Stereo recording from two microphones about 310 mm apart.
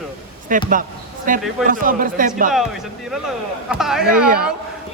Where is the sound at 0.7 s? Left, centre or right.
Right.